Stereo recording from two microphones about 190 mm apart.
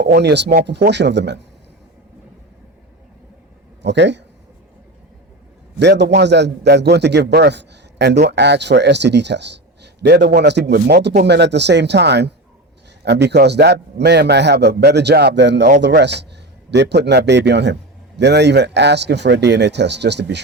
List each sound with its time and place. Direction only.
0.0 s a man's voice: 60° right (ahead or behind)
3.8 s a man's voice: 65° right (ahead or behind)
5.8 s a man's voice: 65° right (ahead or behind)